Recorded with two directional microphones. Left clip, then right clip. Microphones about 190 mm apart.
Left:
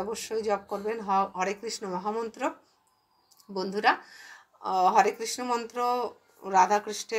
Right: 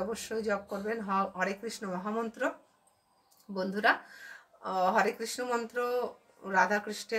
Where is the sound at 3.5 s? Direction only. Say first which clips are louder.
Left 3 dB; 15° left (ahead or behind).